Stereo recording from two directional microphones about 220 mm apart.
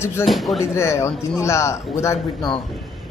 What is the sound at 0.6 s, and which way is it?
A man's voice, 10° left (ahead or behind).